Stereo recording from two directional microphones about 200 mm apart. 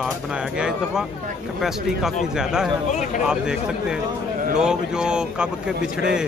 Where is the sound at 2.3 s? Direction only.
5° right (ahead or behind).